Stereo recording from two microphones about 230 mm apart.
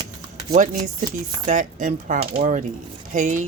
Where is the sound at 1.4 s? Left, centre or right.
Right.